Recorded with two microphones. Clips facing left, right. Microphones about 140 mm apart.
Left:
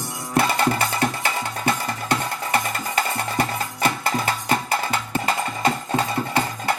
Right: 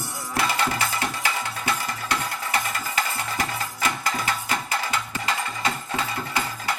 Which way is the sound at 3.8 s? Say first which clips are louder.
Left 4 dB; 30° left (ahead or behind).